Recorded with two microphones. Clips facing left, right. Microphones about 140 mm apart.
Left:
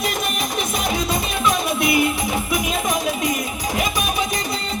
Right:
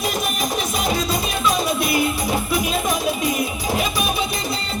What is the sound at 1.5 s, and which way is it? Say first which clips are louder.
Music: left 1 dB; 20° left (ahead or behind).